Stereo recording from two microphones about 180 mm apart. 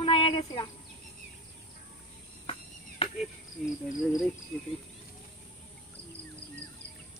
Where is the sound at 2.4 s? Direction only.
30° left (ahead or behind).